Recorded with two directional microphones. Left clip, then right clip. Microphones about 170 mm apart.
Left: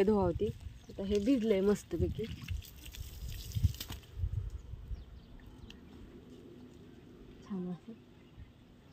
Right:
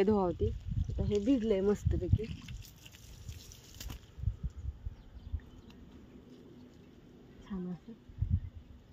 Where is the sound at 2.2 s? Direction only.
35° left (ahead or behind).